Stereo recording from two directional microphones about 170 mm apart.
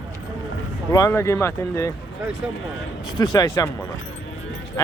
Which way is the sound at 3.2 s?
25° left (ahead or behind).